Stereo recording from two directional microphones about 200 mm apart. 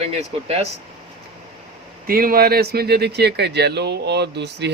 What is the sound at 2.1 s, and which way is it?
Speech, 45° right (ahead or behind).